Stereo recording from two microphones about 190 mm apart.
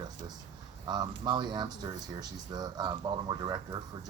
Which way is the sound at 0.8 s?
20° right (ahead or behind).